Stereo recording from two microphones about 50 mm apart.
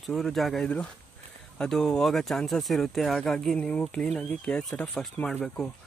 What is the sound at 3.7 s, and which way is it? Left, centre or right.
Speech, left.